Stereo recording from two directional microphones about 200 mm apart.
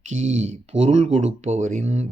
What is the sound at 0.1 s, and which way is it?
Speech, 35° right (ahead or behind).